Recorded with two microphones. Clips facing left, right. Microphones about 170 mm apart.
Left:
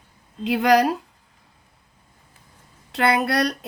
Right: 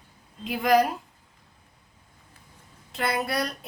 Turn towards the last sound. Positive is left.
turn(degrees=70)  # may be behind; listen again after turning